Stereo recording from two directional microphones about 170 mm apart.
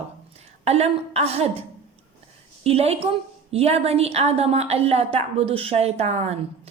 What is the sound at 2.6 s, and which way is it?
A woman's voice, 35° right (ahead or behind).